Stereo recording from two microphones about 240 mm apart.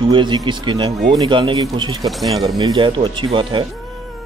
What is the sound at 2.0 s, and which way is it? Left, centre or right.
Speech, centre.